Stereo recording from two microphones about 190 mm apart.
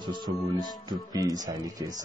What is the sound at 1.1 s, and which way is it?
Speech, 20° right (ahead or behind).